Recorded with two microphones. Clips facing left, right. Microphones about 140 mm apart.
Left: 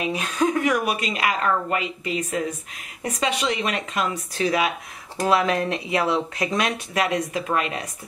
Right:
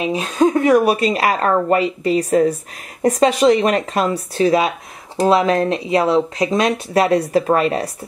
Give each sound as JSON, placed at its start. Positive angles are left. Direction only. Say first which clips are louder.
{"t": 0.0, "sound": "speech", "louder": "right 7 dB", "side_deg": -25}